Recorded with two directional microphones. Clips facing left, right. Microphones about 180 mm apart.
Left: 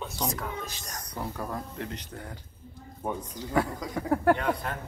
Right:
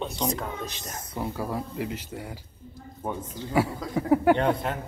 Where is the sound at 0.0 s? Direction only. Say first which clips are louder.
Right 4 dB; 25° right (ahead or behind).